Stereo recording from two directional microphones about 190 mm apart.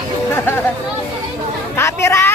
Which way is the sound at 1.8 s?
15° left (ahead or behind).